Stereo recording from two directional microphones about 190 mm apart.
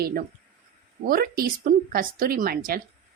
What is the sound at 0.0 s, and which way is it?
A woman's voice, 50° right (ahead or behind).